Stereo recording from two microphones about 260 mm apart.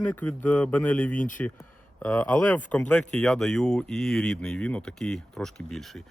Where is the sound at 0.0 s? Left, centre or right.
Centre.